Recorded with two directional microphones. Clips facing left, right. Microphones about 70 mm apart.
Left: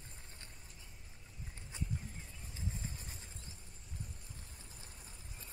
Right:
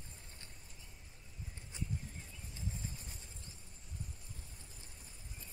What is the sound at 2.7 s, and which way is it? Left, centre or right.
Vehicle, left.